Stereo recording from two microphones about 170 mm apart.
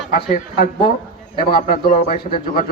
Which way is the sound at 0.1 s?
55° left (ahead or behind).